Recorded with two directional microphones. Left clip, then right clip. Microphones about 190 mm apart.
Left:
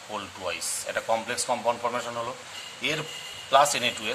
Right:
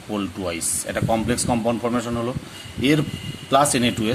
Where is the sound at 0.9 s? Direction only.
20° right (ahead or behind).